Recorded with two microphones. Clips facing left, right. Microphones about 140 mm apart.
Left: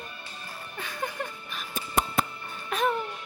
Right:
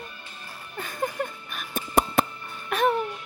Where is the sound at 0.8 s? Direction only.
45° right (ahead or behind).